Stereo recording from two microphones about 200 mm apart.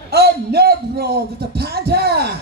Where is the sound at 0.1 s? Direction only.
55° right (ahead or behind).